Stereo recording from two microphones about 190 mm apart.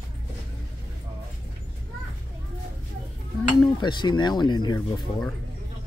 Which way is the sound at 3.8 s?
25° left (ahead or behind).